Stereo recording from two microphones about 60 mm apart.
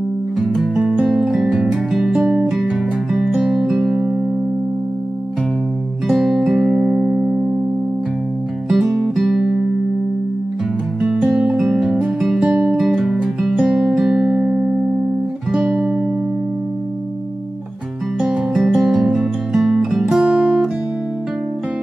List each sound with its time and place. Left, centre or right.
0.6 s music: centre
6.0 s music: centre
8.6 s music: centre
11.0 s music: centre
12.4 s music: right
12.7 s music: centre
18.2 s music: centre
18.6 s guitar: centre